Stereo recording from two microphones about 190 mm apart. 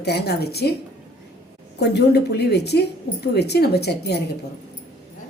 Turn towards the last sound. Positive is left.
turn(degrees=60)  # may be behind; listen again after turning